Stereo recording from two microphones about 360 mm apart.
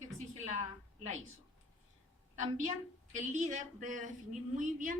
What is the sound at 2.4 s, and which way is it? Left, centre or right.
Speech, right.